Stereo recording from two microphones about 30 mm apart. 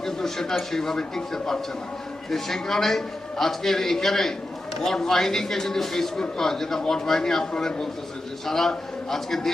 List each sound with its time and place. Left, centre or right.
0.0 s a sound: centre
0.7 s a man's voice: centre
8.4 s a man's voice: centre